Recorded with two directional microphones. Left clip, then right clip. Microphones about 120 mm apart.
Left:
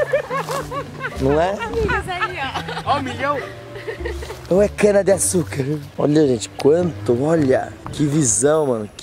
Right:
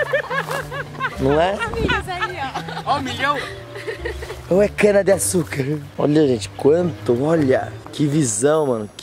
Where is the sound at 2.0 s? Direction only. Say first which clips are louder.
Left 1 dB; 10° right (ahead or behind).